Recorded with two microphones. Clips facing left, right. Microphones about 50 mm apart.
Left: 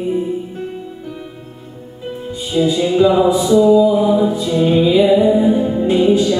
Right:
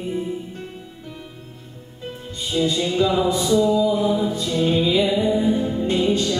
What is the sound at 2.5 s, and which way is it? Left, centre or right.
Music, centre.